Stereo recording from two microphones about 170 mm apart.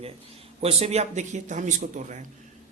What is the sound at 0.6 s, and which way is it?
Speech, 35° right (ahead or behind).